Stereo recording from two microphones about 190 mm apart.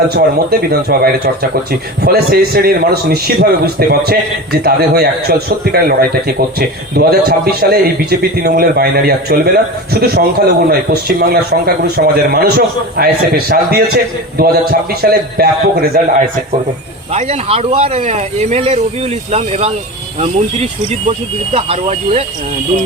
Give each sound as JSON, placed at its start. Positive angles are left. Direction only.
{"t": 0.1, "sound": "a man's voice", "side_deg": -55}
{"t": 17.1, "sound": "speech", "side_deg": -35}